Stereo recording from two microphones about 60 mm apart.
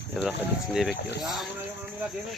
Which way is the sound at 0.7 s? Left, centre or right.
Centre.